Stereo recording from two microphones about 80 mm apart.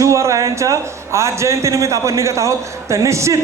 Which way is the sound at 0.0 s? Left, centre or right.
Right.